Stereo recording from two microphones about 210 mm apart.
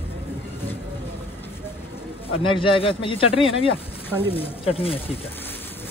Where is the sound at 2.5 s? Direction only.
25° left (ahead or behind).